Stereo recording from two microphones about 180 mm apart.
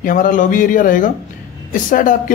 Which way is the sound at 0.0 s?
50° left (ahead or behind).